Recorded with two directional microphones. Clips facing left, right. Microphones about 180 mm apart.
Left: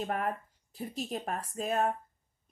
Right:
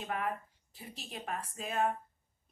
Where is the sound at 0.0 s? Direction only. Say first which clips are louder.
Left 4 dB; 45° left (ahead or behind).